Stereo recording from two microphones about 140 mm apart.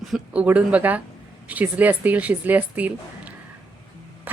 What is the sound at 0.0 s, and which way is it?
Speech, centre (ahead or behind).